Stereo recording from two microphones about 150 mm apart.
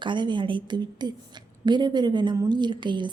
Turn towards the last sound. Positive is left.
turn(degrees=-30)  # may be behind; listen again after turning